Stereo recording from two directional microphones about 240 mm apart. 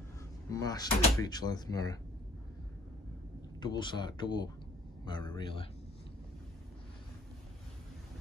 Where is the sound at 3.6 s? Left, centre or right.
Centre.